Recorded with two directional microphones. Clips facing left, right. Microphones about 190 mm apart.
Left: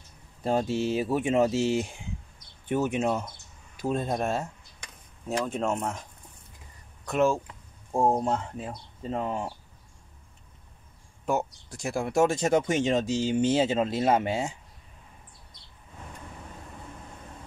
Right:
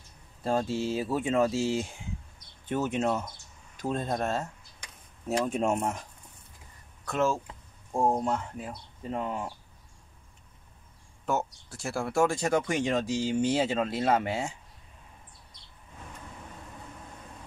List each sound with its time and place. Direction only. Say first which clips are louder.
0.4 s speech: left 2 dB; 20° left (ahead or behind)
5.4 s speech: right 1 dB; 10° right (ahead or behind)
7.1 s speech: left 3 dB; 15° left (ahead or behind)
11.2 s speech: left 2 dB; 15° left (ahead or behind)